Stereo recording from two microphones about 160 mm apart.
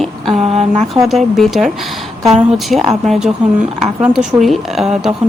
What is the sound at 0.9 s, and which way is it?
Speech, centre (ahead or behind).